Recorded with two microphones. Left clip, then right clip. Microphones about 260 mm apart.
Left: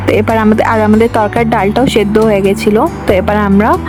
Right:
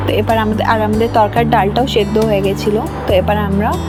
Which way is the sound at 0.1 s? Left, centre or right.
Left.